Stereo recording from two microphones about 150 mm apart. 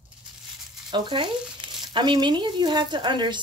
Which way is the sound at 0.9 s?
30° right (ahead or behind).